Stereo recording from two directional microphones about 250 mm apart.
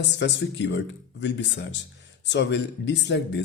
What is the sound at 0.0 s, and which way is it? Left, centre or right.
Speech, left.